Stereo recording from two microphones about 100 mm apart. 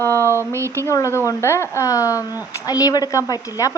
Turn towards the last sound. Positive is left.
turn(degrees=35)  # may be behind; listen again after turning